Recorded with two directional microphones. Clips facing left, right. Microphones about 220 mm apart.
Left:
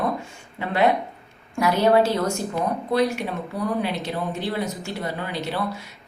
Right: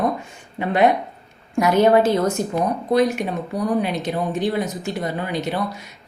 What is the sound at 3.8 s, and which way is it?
Speech, 20° right (ahead or behind).